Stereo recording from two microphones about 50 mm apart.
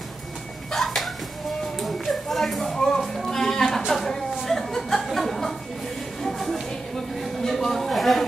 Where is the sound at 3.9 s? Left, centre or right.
Centre.